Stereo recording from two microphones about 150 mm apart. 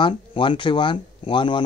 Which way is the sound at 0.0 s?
35° left (ahead or behind).